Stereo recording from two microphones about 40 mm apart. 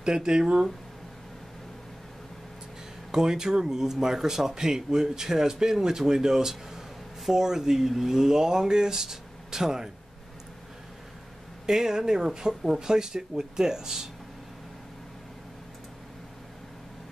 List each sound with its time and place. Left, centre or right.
0.0 s speech: centre
3.1 s speech: centre
11.6 s speech: centre